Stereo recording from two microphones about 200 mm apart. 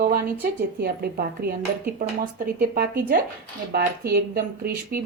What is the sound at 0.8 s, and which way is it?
Speech, 50° right (ahead or behind).